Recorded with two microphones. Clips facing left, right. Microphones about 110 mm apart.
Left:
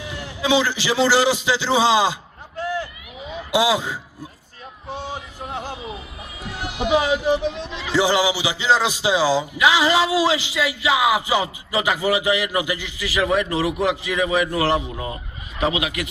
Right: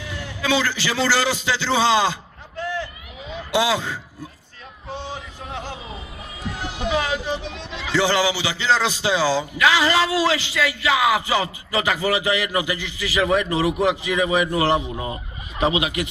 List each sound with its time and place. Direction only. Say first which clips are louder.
0.4 s speech: left 2 dB; 15° left (ahead or behind)
3.5 s speech: left 1 dB; 15° left (ahead or behind)
5.1 s a sound: left 2 dB; 15° left (ahead or behind)
6.6 s a man's voice: left 4 dB; 15° left (ahead or behind); by 14.6 s 5° right (ahead or behind)
14.6 s a man's voice: right 1 dB; 20° right (ahead or behind)
15.6 s speech: right 1 dB; 30° right (ahead or behind)